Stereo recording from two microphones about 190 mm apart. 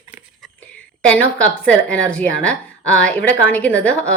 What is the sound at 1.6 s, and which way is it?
A woman's voice, 5° left (ahead or behind).